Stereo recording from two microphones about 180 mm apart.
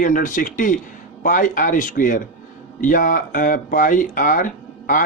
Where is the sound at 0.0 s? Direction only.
50° left (ahead or behind).